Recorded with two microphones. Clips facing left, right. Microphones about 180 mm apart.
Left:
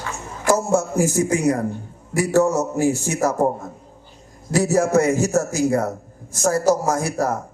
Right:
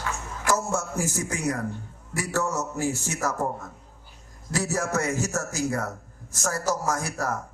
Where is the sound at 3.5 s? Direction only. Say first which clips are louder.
Left 9 dB; 30° left (ahead or behind).